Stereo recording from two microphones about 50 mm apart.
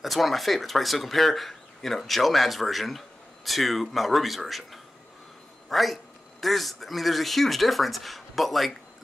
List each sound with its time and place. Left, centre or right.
0.0 s speech: centre
5.7 s speech: centre